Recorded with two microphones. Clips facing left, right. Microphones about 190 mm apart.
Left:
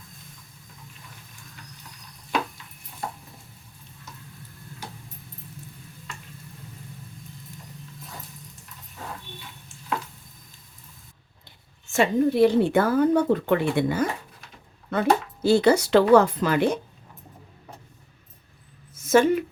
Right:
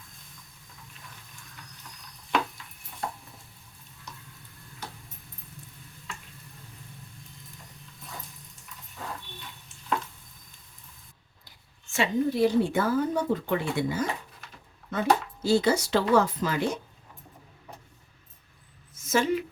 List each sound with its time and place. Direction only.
11.9 s speech: 55° left (ahead or behind)
19.1 s a woman's voice: 50° left (ahead or behind)